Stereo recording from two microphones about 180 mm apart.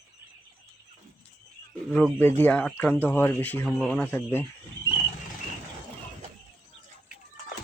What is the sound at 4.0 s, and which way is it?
Speech, 10° left (ahead or behind).